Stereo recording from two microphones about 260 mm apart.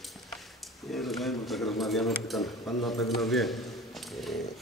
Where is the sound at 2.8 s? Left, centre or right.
Centre.